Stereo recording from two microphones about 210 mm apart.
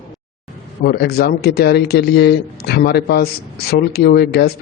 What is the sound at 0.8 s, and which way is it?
Speech, 50° left (ahead or behind).